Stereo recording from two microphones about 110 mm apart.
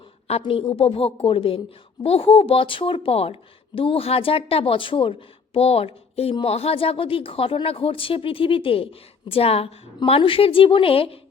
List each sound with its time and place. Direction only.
0.3 s speech: 60° left (ahead or behind)
5.5 s speech: 65° left (ahead or behind)